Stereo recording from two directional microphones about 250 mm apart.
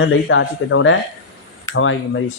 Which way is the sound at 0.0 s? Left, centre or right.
Left.